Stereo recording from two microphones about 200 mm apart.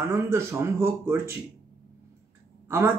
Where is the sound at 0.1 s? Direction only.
15° right (ahead or behind).